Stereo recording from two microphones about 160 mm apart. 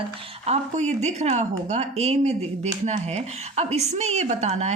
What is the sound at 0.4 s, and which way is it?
Speech, 45° right (ahead or behind).